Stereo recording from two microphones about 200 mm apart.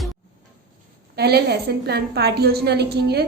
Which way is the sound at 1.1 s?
55° right (ahead or behind).